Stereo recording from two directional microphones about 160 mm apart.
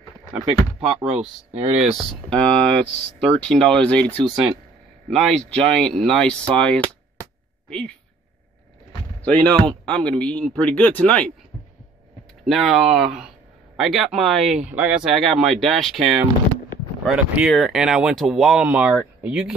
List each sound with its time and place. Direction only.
0.7 s speech: 40° right (ahead or behind)
2.0 s speech: 5° left (ahead or behind)
9.2 s speech: 10° left (ahead or behind)
12.4 s speech: centre (ahead or behind)